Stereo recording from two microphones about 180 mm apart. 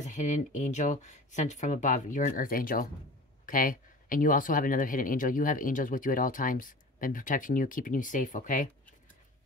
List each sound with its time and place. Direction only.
0.0 s speech: 45° left (ahead or behind)